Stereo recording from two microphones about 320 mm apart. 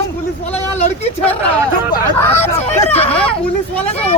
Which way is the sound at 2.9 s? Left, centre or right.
Centre.